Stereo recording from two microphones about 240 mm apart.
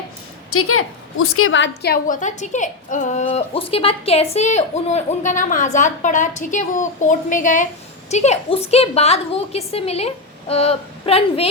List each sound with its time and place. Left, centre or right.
0.5 s a woman's voice: left